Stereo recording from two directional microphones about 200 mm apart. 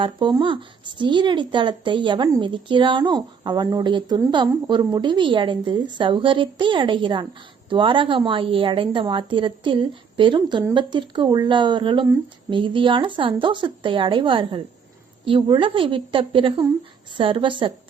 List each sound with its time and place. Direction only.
0.0 s speech: 25° right (ahead or behind)